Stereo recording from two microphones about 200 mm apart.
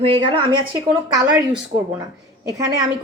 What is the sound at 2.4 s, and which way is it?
Speech, 15° right (ahead or behind).